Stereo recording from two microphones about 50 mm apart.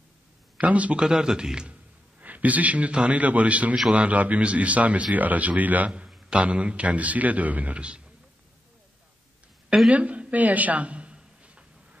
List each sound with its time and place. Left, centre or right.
0.6 s speech: right
1.0 s a man's voice: centre
2.1 s a man's voice: right
9.8 s a sound: right